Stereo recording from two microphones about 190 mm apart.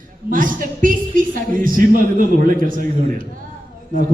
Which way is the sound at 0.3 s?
45° right (ahead or behind).